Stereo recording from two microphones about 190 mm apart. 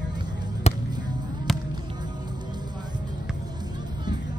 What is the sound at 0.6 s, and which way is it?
Basketball bounce, 35° left (ahead or behind).